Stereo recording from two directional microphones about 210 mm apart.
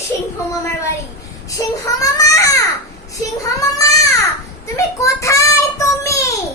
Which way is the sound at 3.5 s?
15° left (ahead or behind).